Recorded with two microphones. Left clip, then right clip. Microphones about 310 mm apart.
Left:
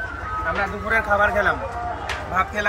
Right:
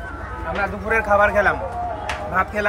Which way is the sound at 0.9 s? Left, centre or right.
Centre.